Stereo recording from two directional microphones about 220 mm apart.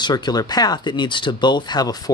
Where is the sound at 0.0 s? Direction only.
20° left (ahead or behind).